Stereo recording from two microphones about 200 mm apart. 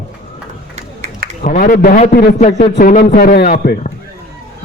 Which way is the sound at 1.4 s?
45° left (ahead or behind).